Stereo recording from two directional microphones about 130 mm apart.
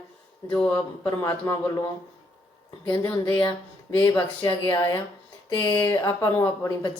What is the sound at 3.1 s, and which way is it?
Speech, 35° left (ahead or behind).